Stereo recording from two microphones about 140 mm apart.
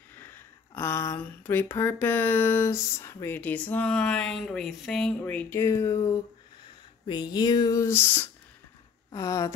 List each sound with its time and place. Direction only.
0.1 s speech: 15° left (ahead or behind)